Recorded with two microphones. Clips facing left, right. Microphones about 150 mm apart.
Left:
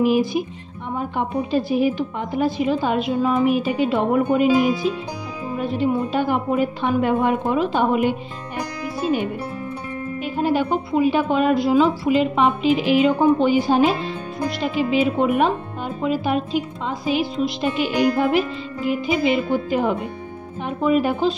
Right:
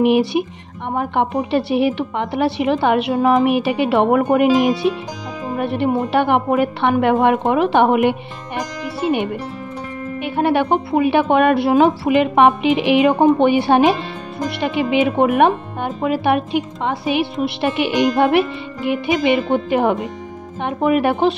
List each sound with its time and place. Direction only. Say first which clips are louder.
0.0 s speech: right 3 dB; 70° right (ahead or behind)